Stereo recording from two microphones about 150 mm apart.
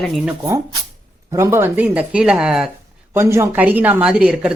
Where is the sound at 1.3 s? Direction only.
15° right (ahead or behind).